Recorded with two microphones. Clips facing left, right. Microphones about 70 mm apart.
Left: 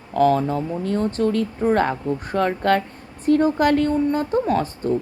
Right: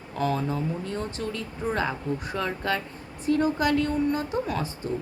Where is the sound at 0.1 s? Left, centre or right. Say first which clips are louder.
Left 9 dB; left.